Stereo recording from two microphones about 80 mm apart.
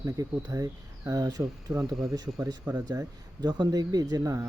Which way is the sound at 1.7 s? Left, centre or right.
Centre.